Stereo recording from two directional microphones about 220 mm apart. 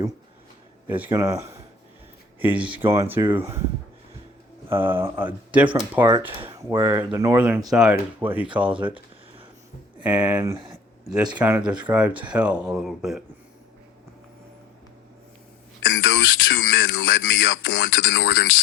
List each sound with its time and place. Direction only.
0.9 s speech: 10° right (ahead or behind)
4.7 s speech: 10° right (ahead or behind)
10.0 s speech: 5° right (ahead or behind)
15.8 s speech: 55° left (ahead or behind)